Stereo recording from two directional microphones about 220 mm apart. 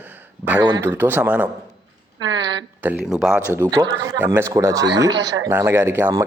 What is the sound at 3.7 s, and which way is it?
Speech, 15° right (ahead or behind).